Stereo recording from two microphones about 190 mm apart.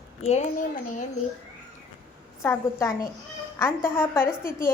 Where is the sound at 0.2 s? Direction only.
35° left (ahead or behind).